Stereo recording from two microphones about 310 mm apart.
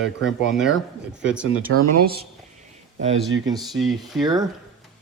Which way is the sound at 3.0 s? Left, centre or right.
Right.